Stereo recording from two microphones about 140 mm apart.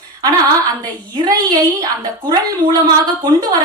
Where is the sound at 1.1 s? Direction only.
25° right (ahead or behind).